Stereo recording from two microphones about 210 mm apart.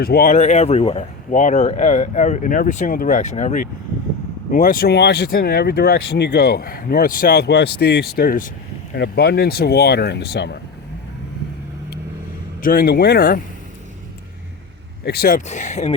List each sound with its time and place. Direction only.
0.0 s speech: 45° left (ahead or behind)
12.6 s speech: 45° left (ahead or behind)
15.0 s speech: 50° left (ahead or behind); by 16.0 s 35° left (ahead or behind)